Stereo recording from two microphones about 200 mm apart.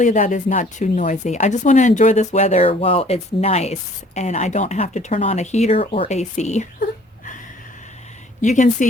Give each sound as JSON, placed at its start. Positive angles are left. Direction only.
{"t": 0.0, "sound": "speech", "side_deg": 40}
{"t": 8.4, "sound": "speech", "side_deg": 40}